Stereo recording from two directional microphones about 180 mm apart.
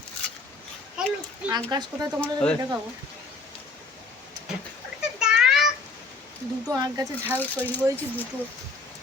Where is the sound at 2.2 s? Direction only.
5° left (ahead or behind).